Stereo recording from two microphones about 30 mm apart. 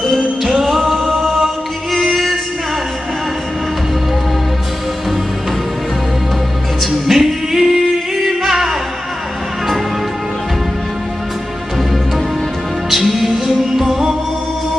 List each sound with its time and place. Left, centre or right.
0.7 s a capella: centre
1.0 s music: centre
6.8 s music: centre
12.9 s music: centre